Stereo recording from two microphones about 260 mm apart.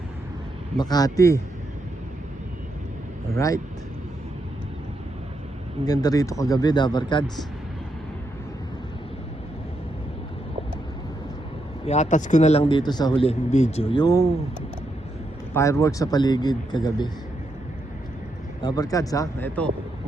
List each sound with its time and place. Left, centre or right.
0.8 s speech: centre
3.3 s speech: centre
5.8 s speech: centre
11.9 s speech: left
15.5 s speech: centre
18.6 s speech: centre